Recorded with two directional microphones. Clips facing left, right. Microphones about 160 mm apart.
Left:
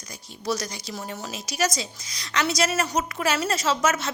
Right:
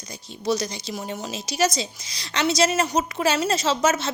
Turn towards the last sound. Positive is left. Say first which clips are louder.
# right 2 dB
turn(degrees=-25)  # may be behind; listen again after turning